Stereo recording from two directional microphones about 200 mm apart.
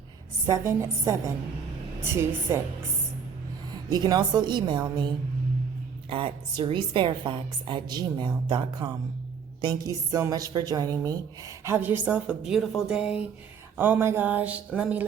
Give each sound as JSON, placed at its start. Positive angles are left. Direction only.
{"t": 0.4, "sound": "a woman's voice", "side_deg": -15}
{"t": 3.8, "sound": "a woman's voice", "side_deg": -20}
{"t": 6.1, "sound": "a woman's voice", "side_deg": -25}